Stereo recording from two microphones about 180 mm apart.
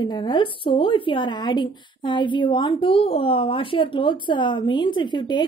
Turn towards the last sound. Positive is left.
turn(degrees=25)  # may be behind; listen again after turning